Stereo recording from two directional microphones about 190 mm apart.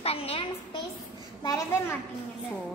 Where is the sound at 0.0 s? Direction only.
30° left (ahead or behind).